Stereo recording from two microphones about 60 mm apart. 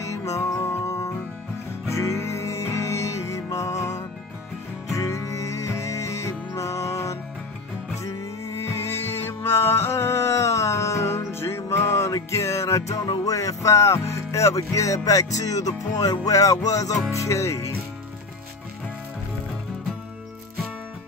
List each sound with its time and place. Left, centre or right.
0.1 s music: left
15.0 s music: left
17.1 s music: left